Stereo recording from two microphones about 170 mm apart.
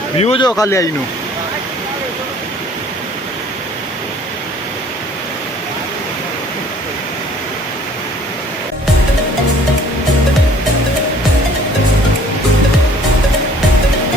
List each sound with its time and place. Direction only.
0.2 s speech: 35° left (ahead or behind)
0.6 s speech: 20° left (ahead or behind)